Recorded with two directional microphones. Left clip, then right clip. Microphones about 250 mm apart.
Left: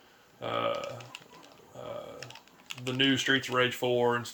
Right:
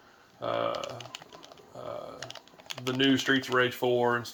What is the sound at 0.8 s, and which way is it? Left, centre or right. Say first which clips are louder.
Speech: right 1 dB; right.